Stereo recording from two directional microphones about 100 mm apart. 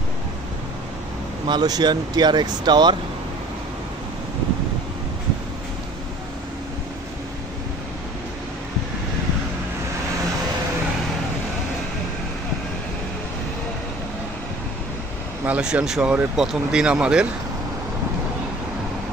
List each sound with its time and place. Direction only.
1.5 s speech: 40° right (ahead or behind)
15.4 s speech: 10° right (ahead or behind)